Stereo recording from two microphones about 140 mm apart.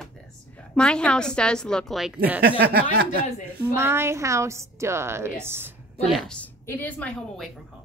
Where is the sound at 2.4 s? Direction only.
90° right.